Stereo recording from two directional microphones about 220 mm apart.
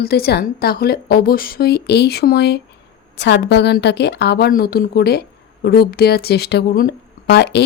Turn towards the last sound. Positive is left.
turn(degrees=50)  # may be behind; listen again after turning